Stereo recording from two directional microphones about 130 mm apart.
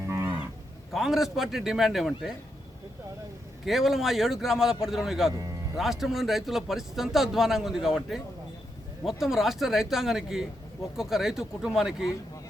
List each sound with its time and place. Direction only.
0.1 s moo: 20° right (ahead or behind)
0.9 s a man's voice: centre (ahead or behind)
3.7 s a man's voice: centre (ahead or behind)